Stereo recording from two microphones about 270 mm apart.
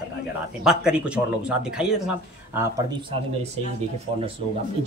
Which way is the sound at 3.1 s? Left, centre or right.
Right.